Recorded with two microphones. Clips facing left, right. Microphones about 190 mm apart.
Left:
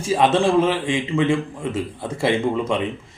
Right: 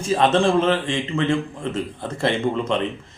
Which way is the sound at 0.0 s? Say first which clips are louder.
Even; 10° left (ahead or behind).